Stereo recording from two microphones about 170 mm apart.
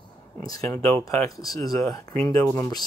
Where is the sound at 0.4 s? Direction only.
20° left (ahead or behind).